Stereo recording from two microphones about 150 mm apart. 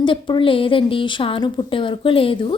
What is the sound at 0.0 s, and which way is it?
A woman's voice, 35° left (ahead or behind).